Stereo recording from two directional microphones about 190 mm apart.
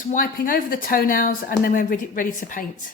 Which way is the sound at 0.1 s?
50° left (ahead or behind).